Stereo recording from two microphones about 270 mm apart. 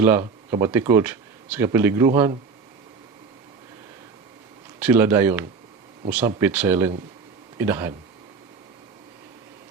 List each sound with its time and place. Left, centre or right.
0.0 s speech: centre
4.8 s speech: centre